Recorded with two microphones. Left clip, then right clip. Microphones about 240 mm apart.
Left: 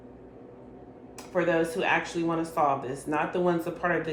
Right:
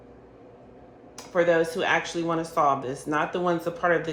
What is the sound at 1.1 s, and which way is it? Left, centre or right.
Speech, right.